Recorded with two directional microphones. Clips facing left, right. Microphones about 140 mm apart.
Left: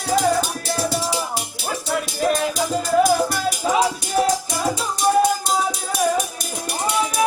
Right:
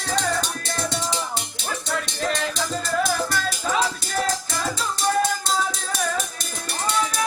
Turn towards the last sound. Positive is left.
turn(degrees=15)  # may be behind; listen again after turning